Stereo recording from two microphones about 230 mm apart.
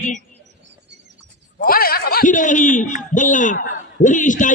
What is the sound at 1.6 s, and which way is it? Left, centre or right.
A man's voice, left.